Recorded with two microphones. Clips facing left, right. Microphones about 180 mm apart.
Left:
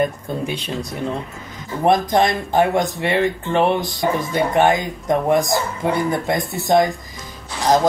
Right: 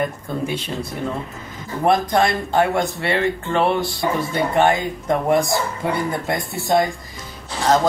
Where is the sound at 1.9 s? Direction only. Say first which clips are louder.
Left 1 dB; 20° left (ahead or behind).